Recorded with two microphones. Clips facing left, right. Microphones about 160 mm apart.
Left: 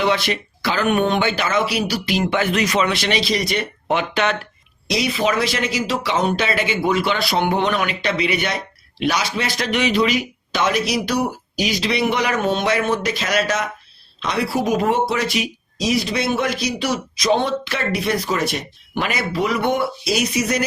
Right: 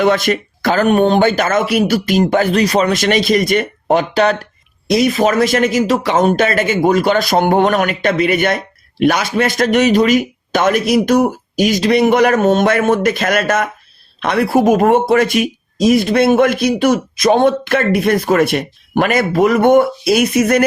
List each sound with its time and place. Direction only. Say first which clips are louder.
0.0 s speech: right 6 dB; 50° right (ahead or behind)
4.9 s speech: right 7 dB; 50° right (ahead or behind)